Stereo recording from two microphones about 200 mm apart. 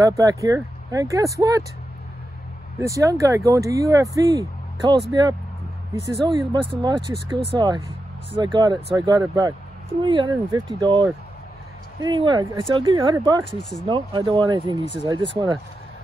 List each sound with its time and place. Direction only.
0.0 s speech: 20° right (ahead or behind)
2.8 s speech: 15° right (ahead or behind)
6.2 s speech: 20° right (ahead or behind)